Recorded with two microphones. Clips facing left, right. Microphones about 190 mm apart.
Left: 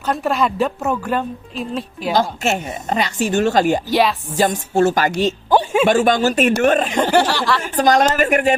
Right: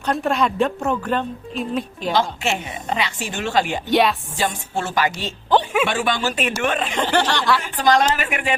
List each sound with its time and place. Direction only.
0.0 s a woman's voice: centre (ahead or behind)
2.1 s a woman's voice: 45° left (ahead or behind)
3.8 s a woman's voice: centre (ahead or behind)
4.4 s a woman's voice: 40° left (ahead or behind)
7.1 s speech: 10° left (ahead or behind)
7.6 s a woman's voice: 45° left (ahead or behind)